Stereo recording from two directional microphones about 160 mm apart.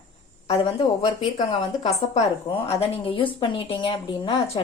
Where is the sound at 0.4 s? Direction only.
35° left (ahead or behind).